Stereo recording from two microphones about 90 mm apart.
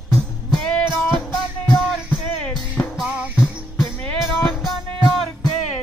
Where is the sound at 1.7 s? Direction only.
10° left (ahead or behind).